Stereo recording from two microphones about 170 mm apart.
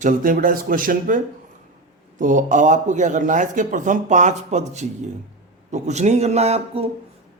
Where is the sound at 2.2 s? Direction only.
50° right (ahead or behind).